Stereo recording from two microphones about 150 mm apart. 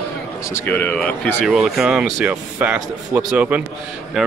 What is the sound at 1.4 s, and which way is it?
Speech, 5° right (ahead or behind).